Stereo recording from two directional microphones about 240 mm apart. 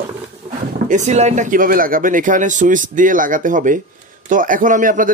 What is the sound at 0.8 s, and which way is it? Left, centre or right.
Speech, right.